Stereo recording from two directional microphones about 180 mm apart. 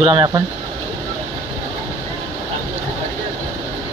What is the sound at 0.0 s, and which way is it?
Speech, 30° right (ahead or behind).